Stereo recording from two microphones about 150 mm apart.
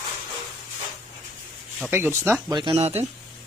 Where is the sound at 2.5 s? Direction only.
30° right (ahead or behind).